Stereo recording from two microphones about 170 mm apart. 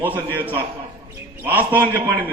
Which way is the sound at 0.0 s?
10° right (ahead or behind).